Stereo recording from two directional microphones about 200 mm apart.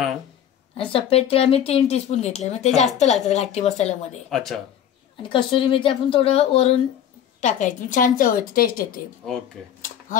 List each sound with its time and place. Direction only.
0.7 s speech: 30° left (ahead or behind)
2.7 s a woman's voice: centre (ahead or behind)
3.3 s speech: 35° left (ahead or behind)
4.3 s a woman's voice: centre (ahead or behind)
5.3 s speech: 25° left (ahead or behind); by 8.8 s 45° left (ahead or behind)
9.2 s a woman's voice: centre (ahead or behind)
9.8 s a sound: 40° left (ahead or behind)